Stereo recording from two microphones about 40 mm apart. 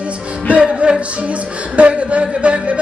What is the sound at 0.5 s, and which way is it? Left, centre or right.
Music, right.